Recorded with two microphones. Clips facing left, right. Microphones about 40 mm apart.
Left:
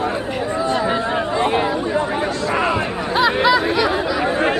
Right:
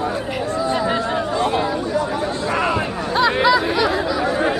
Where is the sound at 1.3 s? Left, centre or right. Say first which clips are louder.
Left 2 dB; left.